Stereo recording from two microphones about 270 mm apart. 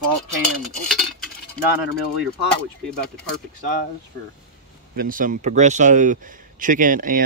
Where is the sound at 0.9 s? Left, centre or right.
Centre.